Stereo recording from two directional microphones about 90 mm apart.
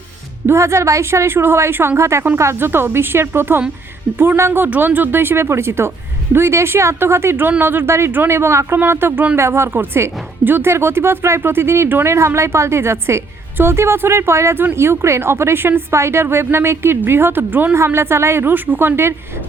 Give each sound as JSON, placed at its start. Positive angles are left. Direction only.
{"t": 0.4, "sound": "speech", "side_deg": -30}